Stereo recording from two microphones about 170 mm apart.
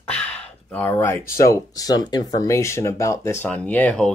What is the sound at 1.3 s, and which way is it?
Speech, 20° left (ahead or behind).